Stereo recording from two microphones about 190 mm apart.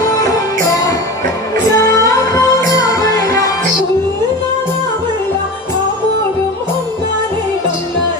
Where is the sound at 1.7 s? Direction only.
15° left (ahead or behind).